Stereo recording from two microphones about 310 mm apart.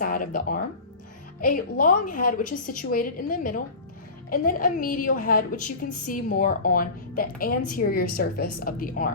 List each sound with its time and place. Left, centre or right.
0.0 s music: left
1.5 s a woman's voice: left